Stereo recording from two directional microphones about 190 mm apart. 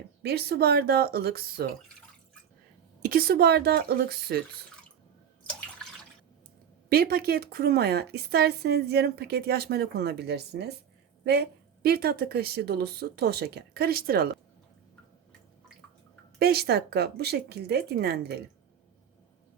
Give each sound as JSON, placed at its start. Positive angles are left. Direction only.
{"t": 0.2, "sound": "a woman's voice", "side_deg": -55}
{"t": 3.0, "sound": "a woman's voice", "side_deg": -50}
{"t": 5.5, "sound": "drip", "side_deg": 5}
{"t": 6.9, "sound": "a woman's voice", "side_deg": -55}
{"t": 16.4, "sound": "a woman's voice", "side_deg": -55}